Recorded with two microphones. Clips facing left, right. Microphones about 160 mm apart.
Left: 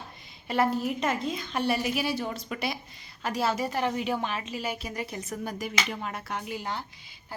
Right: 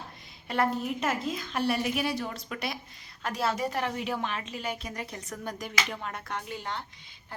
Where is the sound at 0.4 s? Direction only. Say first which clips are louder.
Left 2 dB; centre (ahead or behind).